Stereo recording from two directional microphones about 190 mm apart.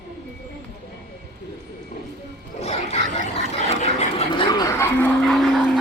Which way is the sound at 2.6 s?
35° left (ahead or behind).